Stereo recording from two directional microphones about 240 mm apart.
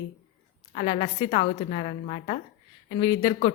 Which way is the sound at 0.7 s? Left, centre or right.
Left.